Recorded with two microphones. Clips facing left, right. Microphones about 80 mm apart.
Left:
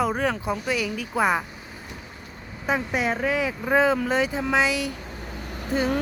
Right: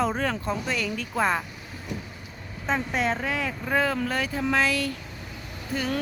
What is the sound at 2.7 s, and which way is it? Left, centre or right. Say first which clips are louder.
Speech: left 1 dB; centre.